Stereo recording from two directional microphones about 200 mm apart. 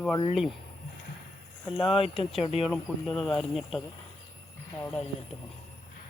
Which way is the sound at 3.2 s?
Centre (ahead or behind).